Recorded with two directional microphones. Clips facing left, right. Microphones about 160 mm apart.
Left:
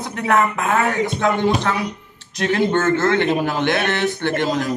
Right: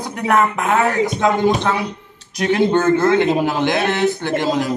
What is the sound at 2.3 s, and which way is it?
A man's voice, 15° right (ahead or behind).